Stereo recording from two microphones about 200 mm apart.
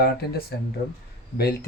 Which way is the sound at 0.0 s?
50° left (ahead or behind).